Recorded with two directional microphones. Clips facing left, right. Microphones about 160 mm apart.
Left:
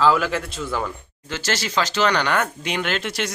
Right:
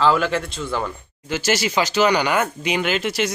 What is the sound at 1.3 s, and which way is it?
Speech, 10° right (ahead or behind).